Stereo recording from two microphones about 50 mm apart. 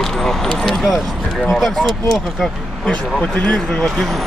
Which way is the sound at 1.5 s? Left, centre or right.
Centre.